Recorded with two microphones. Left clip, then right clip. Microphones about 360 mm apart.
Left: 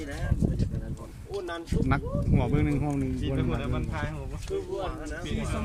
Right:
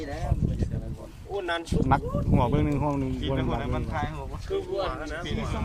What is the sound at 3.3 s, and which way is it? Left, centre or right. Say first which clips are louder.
Speech: right 3 dB; centre.